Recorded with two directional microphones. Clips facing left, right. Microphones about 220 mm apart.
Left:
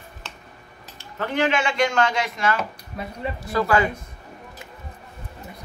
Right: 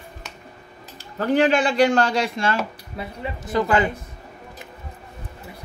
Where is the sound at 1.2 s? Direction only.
35° right (ahead or behind).